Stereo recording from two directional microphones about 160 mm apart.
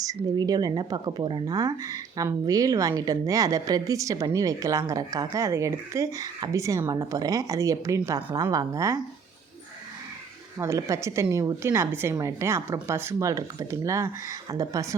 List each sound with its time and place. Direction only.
0.2 s speech: 25° right (ahead or behind)
10.6 s speech: 20° right (ahead or behind)